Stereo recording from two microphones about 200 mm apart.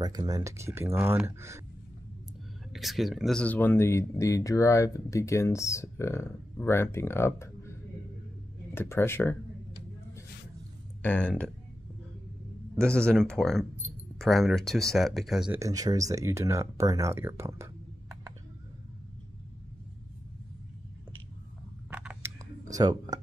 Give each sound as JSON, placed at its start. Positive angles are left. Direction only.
{"t": 0.0, "sound": "speech", "side_deg": -20}
{"t": 2.7, "sound": "speech", "side_deg": 0}
{"t": 8.7, "sound": "speech", "side_deg": 10}
{"t": 11.0, "sound": "speech", "side_deg": 5}
{"t": 12.7, "sound": "speech", "side_deg": 5}
{"t": 15.6, "sound": "speech", "side_deg": -20}
{"t": 22.7, "sound": "speech", "side_deg": -20}